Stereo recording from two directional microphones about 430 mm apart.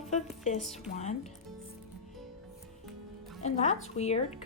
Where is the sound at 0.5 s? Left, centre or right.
Centre.